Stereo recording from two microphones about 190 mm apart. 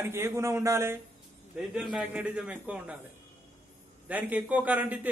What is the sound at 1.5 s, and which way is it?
A man's voice, 5° right (ahead or behind).